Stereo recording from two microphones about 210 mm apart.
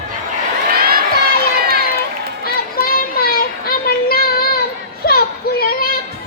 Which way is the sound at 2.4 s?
45° left (ahead or behind).